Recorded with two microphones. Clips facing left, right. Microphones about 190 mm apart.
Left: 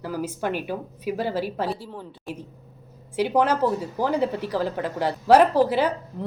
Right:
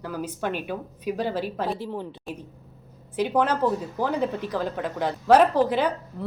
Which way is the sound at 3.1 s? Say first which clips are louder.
Left 2 dB; 10° left (ahead or behind).